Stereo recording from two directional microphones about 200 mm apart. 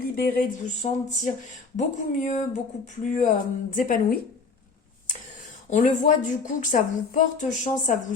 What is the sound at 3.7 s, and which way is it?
Speech, 45° left (ahead or behind).